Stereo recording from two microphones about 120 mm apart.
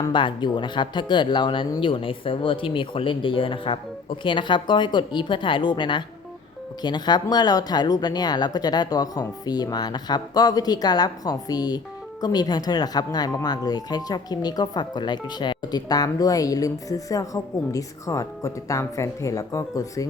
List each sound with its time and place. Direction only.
0.1 s speech: 40° left (ahead or behind)